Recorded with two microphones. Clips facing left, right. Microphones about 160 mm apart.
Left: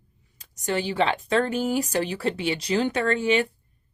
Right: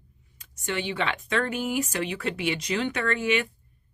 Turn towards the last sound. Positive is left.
turn(degrees=30)  # may be behind; listen again after turning